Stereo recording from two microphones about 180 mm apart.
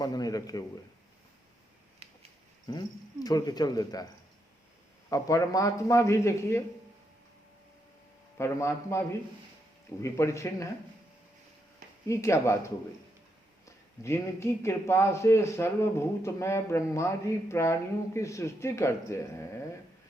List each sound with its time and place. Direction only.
0.0 s speech: 20° left (ahead or behind)
2.0 s a sound: 35° right (ahead or behind)
2.6 s speech: 20° left (ahead or behind)
5.0 s a man's voice: 15° left (ahead or behind)
8.4 s a man's voice: 15° left (ahead or behind)
12.0 s a man's voice: 15° left (ahead or behind)
14.0 s a man's voice: 15° left (ahead or behind)